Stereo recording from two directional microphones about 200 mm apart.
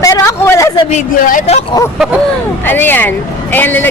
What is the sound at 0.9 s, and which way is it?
Speech, 40° left (ahead or behind).